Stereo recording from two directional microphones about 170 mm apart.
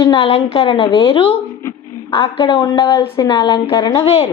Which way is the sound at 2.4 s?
25° left (ahead or behind).